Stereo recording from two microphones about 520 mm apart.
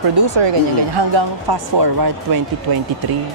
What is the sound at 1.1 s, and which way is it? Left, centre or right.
Speech, right.